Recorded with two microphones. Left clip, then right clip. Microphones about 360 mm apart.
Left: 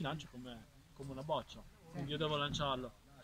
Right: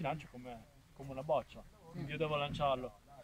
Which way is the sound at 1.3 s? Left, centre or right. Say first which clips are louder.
Right 4 dB; right.